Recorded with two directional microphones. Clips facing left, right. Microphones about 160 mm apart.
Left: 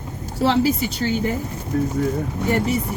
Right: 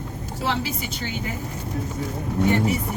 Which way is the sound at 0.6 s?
40° left (ahead or behind).